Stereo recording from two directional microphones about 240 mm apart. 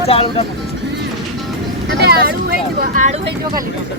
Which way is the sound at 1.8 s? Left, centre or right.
Right.